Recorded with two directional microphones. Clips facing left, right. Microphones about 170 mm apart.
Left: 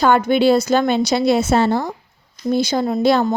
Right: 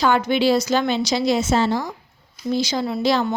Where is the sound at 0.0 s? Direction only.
50° left (ahead or behind).